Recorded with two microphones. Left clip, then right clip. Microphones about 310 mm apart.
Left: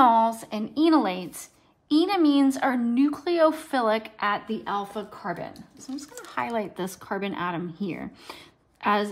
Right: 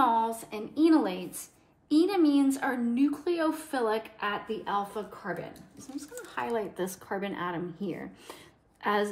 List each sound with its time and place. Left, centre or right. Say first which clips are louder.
0.0 s a sound: left 7 dB; left
1.9 s speech: left 3 dB; centre
6.3 s speech: left 3 dB; left